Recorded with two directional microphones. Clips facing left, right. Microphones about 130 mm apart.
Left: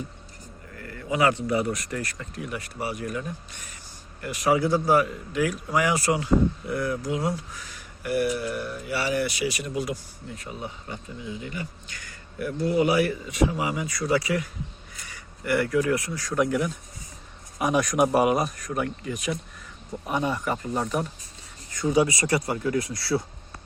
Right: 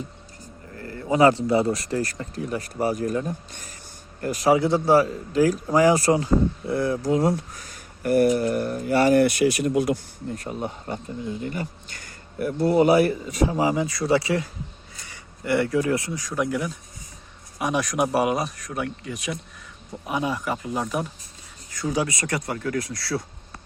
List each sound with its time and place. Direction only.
0.7 s speech: 30° right (ahead or behind)
16.3 s speech: centre (ahead or behind)